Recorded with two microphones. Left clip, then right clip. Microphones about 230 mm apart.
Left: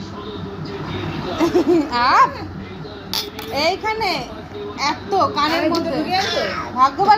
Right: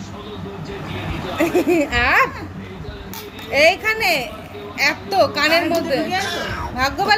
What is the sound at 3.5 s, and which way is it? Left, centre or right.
Speech, right.